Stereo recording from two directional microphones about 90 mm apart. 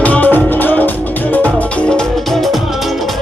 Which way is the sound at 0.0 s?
20° left (ahead or behind).